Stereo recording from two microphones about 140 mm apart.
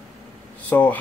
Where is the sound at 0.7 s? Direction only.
10° left (ahead or behind).